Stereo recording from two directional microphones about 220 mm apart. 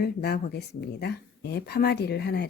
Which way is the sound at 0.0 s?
45° left (ahead or behind).